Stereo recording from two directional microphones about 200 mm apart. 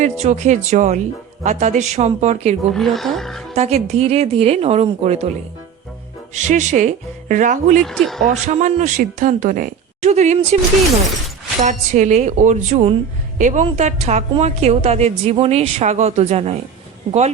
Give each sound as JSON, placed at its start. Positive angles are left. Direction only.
{"t": 0.0, "sound": "a woman's voice", "side_deg": -35}
{"t": 2.7, "sound": "speech", "side_deg": 0}
{"t": 3.5, "sound": "a woman's voice", "side_deg": -30}
{"t": 6.3, "sound": "a woman's voice", "side_deg": -35}
{"t": 7.9, "sound": "speech", "side_deg": 0}
{"t": 8.3, "sound": "a woman's voice", "side_deg": -35}
{"t": 11.6, "sound": "a woman's voice", "side_deg": -35}